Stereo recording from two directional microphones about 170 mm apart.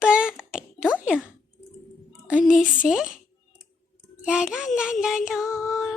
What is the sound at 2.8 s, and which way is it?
Child singing, 5° right (ahead or behind).